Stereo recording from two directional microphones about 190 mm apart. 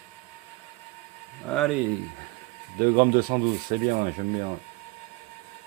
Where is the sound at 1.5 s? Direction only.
Centre (ahead or behind).